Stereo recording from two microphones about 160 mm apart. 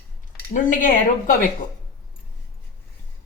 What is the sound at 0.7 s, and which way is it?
Speech, 55° left (ahead or behind).